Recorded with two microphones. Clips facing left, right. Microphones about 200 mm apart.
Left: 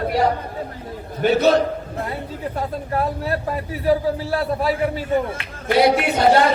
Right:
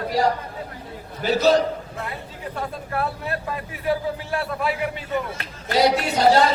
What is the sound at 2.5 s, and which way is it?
A man's voice, 35° left (ahead or behind).